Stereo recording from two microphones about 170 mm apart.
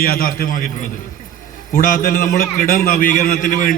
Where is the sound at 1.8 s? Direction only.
50° left (ahead or behind).